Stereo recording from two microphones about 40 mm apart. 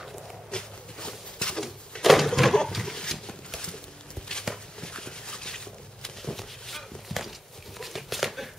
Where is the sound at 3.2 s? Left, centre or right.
Centre.